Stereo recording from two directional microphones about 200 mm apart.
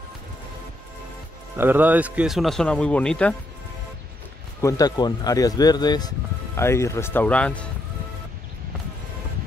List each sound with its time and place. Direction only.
1.6 s speech: 10° right (ahead or behind)
4.6 s speech: 15° left (ahead or behind)